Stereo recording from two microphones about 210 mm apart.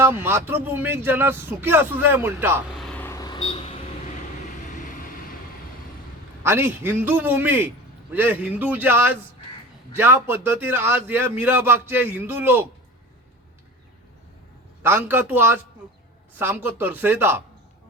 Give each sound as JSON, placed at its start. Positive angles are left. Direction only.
{"t": 0.0, "sound": "a man's voice", "side_deg": -10}
{"t": 2.7, "sound": "vehicle", "side_deg": 5}
{"t": 6.4, "sound": "a man's voice", "side_deg": -10}
{"t": 14.8, "sound": "a man's voice", "side_deg": -10}